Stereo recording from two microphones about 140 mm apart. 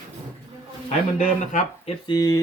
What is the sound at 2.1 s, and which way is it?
Speech, 30° left (ahead or behind).